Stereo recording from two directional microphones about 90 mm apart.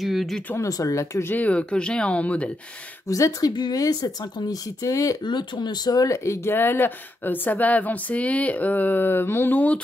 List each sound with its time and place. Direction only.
0.0 s speech: centre (ahead or behind)
0.6 s speech: 40° left (ahead or behind)
1.3 s speech: 15° left (ahead or behind)
3.1 s speech: 40° left (ahead or behind)
5.2 s speech: 60° left (ahead or behind); by 9.8 s 20° left (ahead or behind)